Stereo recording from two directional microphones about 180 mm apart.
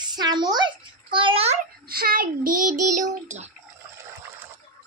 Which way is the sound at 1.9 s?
55° right (ahead or behind).